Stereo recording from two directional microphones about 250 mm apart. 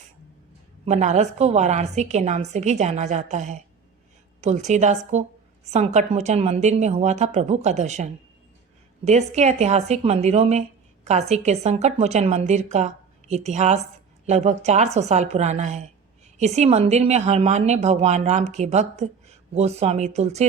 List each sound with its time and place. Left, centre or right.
0.9 s a woman's voice: right